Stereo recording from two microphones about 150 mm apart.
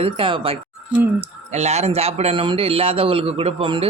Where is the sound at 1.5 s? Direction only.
45° right (ahead or behind).